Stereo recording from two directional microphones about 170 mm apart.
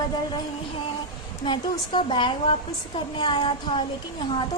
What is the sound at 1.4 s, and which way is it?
A woman's voice, 30° left (ahead or behind).